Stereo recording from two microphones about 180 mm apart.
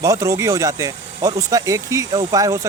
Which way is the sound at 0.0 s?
15° right (ahead or behind).